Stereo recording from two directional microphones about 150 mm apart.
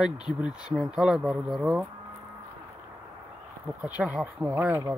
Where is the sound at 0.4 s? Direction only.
5° right (ahead or behind).